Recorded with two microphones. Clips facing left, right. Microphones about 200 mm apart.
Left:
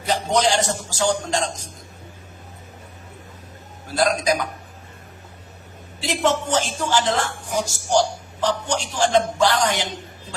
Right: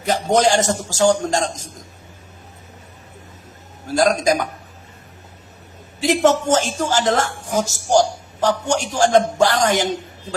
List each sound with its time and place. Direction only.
0.1 s a woman's voice: 45° right (ahead or behind)
3.8 s a woman's voice: 45° right (ahead or behind)
6.0 s a woman's voice: 45° right (ahead or behind)